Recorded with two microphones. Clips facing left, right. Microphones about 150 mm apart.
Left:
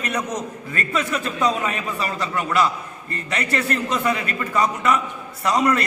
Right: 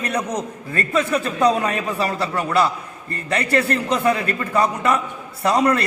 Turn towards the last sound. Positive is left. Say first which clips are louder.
# right 2 dB
turn(degrees=-30)  # may be behind; listen again after turning